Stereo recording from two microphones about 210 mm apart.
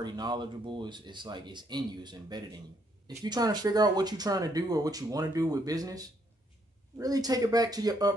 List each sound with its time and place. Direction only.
0.0 s speech: 20° right (ahead or behind)